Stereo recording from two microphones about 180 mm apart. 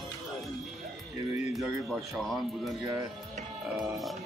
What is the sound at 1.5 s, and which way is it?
Speech, centre (ahead or behind).